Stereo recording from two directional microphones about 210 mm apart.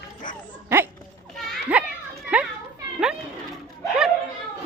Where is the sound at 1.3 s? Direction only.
5° right (ahead or behind).